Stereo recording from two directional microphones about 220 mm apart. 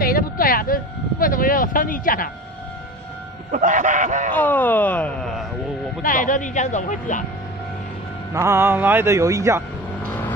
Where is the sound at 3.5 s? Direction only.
35° right (ahead or behind).